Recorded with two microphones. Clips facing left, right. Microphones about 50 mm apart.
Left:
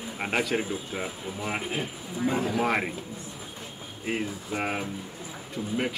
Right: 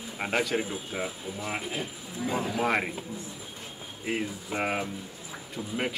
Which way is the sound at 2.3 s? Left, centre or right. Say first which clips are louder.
Even; centre.